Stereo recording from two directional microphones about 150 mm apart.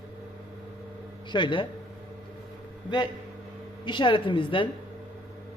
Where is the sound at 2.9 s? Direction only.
30° left (ahead or behind).